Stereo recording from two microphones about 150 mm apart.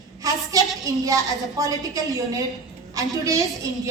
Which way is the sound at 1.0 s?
25° right (ahead or behind).